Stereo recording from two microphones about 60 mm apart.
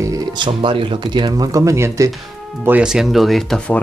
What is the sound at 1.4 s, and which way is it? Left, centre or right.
Speech, right.